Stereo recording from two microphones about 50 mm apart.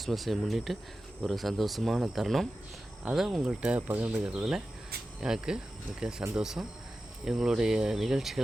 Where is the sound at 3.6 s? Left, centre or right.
Right.